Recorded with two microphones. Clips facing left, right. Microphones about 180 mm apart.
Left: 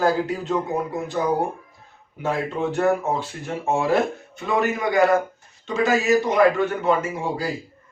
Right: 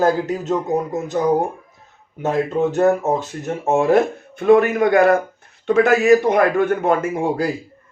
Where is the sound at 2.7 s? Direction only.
40° right (ahead or behind).